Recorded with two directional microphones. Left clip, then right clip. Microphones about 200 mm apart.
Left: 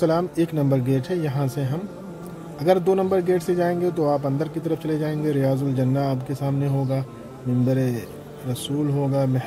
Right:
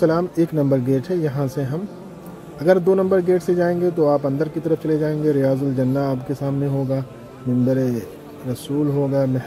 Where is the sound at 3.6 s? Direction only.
20° left (ahead or behind).